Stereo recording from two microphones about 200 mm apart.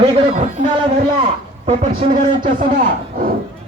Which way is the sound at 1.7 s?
40° right (ahead or behind).